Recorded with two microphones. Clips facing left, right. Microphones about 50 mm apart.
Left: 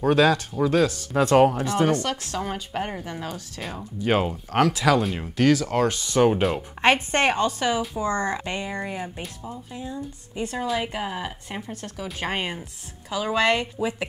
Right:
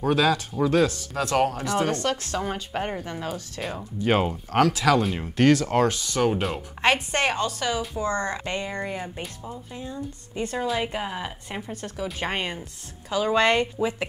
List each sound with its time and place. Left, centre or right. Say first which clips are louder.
0.6 s speech: right 1 dB; centre
0.9 s speech: left 6 dB; left
1.9 s speech: left 1 dB; centre
4.6 s a woman's voice: even; centre
4.8 s speech: even; centre
5.7 s speech: right 1 dB; centre
6.0 s a woman's voice: left 4 dB; centre